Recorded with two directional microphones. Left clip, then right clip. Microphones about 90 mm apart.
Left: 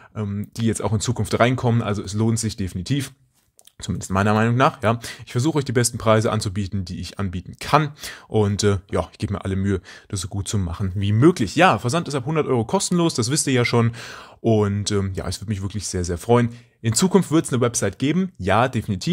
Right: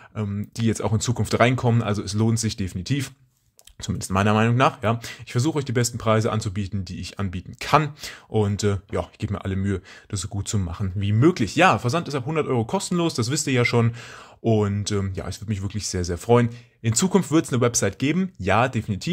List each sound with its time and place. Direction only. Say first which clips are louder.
0.1 s speech: left 1 dB; 20° left (ahead or behind)